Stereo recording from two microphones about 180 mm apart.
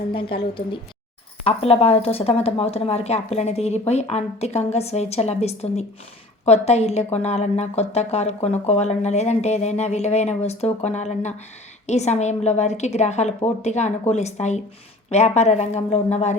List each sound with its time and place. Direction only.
0.1 s a woman's voice: 30° left (ahead or behind)